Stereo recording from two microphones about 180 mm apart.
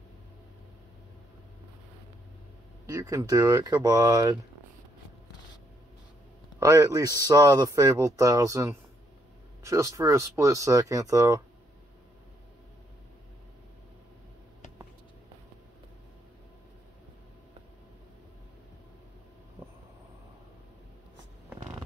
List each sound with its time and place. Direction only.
2.9 s speech: 20° right (ahead or behind)
6.6 s speech: 20° right (ahead or behind)